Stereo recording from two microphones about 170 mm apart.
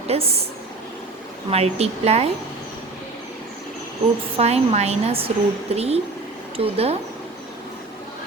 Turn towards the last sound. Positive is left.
turn(degrees=-35)  # may be behind; listen again after turning